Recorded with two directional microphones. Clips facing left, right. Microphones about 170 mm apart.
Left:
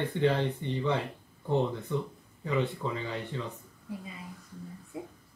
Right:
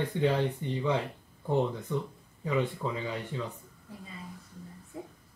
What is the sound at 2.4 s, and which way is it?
Speech, 10° right (ahead or behind).